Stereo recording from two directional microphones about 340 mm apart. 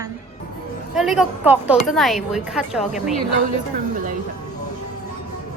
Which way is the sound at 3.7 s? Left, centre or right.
Right.